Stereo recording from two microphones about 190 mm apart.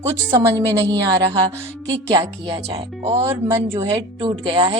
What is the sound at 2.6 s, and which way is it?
Speech, 30° right (ahead or behind).